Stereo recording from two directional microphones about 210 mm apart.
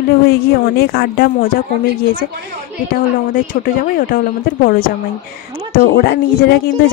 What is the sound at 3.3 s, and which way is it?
Speech, 40° left (ahead or behind).